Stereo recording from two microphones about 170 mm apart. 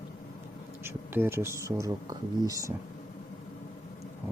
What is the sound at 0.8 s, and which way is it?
Speech, 15° right (ahead or behind).